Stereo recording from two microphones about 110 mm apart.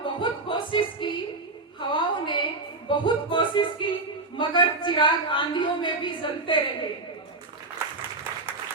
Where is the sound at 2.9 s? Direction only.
50° left (ahead or behind).